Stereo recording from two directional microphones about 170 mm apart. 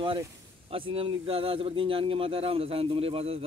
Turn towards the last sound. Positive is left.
turn(degrees=-35)  # may be behind; listen again after turning